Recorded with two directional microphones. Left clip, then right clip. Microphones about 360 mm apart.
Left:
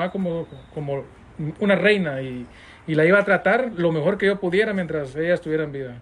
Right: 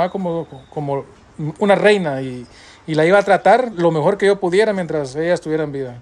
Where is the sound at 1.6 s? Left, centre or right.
Centre.